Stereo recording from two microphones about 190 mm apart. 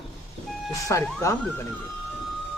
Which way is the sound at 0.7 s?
15° left (ahead or behind).